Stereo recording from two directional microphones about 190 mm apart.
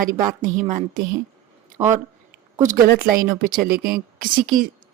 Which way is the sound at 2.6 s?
45° right (ahead or behind).